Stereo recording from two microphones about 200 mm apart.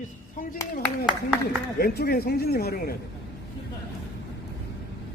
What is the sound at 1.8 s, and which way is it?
Speech, 50° left (ahead or behind).